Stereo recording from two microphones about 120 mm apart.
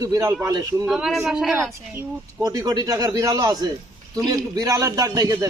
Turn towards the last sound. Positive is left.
turn(degrees=-30)  # may be behind; listen again after turning